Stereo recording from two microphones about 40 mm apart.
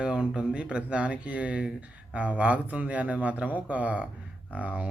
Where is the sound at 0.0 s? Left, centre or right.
Right.